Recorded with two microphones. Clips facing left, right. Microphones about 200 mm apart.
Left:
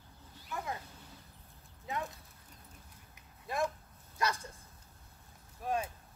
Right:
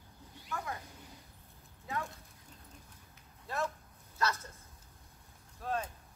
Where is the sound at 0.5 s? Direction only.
20° left (ahead or behind).